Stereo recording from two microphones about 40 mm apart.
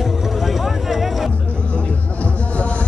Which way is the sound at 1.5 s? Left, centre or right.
Left.